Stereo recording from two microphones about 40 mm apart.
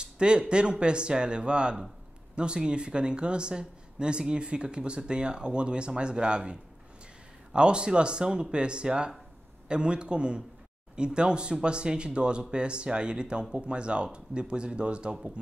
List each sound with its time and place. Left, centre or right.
0.0 s speech: right